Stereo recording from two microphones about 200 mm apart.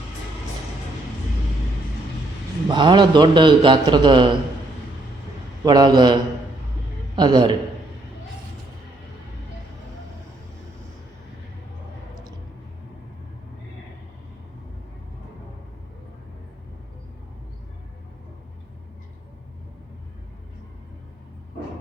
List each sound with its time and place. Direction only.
2.6 s a man's voice: 25° right (ahead or behind)
5.6 s a man's voice: 20° right (ahead or behind)
7.2 s a man's voice: 20° right (ahead or behind)